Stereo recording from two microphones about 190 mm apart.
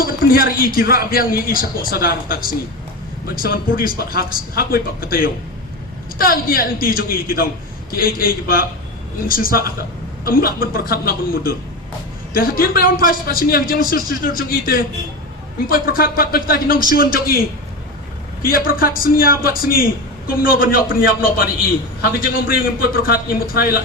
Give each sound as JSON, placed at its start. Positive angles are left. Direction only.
{"t": 0.0, "sound": "a man's voice", "side_deg": 50}
{"t": 18.4, "sound": "a man's voice", "side_deg": 50}